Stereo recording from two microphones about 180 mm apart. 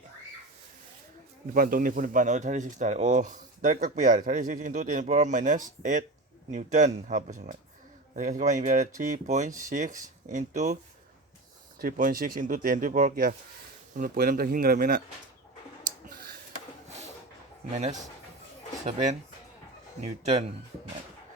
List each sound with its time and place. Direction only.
1.5 s speech: 50° right (ahead or behind)
11.8 s speech: 50° right (ahead or behind)
16.0 s a sound: 55° right (ahead or behind)
20.0 s speech: 35° right (ahead or behind)